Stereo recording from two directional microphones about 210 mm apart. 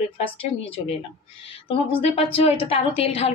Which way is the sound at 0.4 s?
25° left (ahead or behind).